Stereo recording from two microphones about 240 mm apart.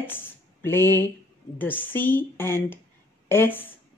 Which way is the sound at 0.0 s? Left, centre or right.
Centre.